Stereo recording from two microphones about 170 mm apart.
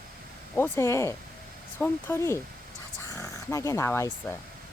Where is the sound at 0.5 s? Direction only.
15° left (ahead or behind).